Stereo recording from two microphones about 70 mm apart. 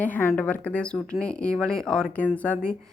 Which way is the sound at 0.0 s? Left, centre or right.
Left.